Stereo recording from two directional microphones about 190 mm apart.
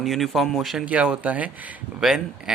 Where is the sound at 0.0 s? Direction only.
Centre (ahead or behind).